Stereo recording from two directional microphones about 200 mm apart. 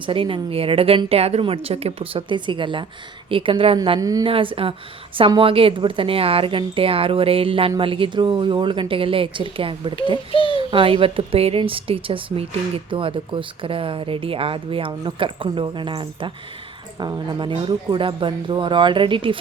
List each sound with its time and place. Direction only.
0.0 s a woman's voice: 25° right (ahead or behind)
10.3 s a child's voice: 25° left (ahead or behind)
10.6 s a woman's voice: 25° right (ahead or behind)